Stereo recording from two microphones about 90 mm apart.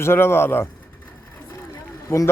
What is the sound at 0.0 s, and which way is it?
Speech, 25° left (ahead or behind).